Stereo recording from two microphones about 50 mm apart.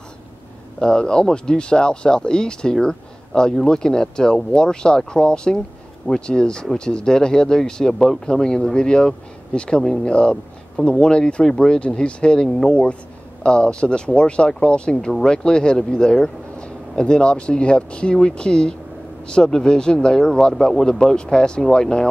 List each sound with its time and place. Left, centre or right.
0.7 s speech: centre